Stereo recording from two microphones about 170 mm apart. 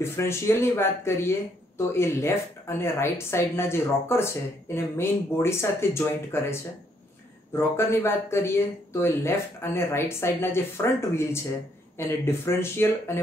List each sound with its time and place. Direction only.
0.0 s speech: 15° left (ahead or behind)